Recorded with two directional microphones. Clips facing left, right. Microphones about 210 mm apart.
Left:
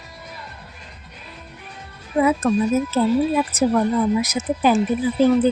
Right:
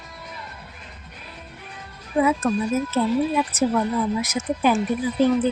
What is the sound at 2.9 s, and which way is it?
A woman's voice, 35° left (ahead or behind).